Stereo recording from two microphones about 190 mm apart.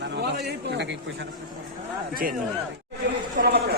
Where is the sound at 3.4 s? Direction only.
55° right (ahead or behind).